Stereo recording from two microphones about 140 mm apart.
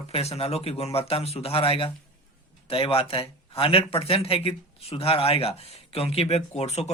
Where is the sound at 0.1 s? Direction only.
45° left (ahead or behind).